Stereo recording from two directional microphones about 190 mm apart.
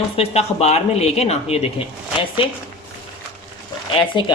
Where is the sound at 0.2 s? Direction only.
35° left (ahead or behind).